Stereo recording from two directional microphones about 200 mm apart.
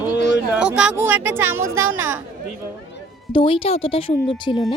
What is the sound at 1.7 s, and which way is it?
Speech, 90° right.